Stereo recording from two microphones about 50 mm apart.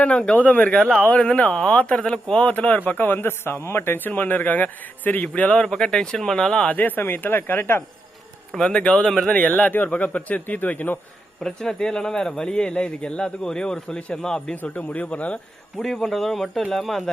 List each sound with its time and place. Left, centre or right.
0.0 s speech: left
0.8 s speech: centre
1.0 s speech: left
2.4 s speech: left
5.6 s speech: centre
6.7 s speech: left
8.5 s speech: centre
9.6 s speech: left
11.3 s speech: centre
14.5 s speech: left
15.8 s speech: centre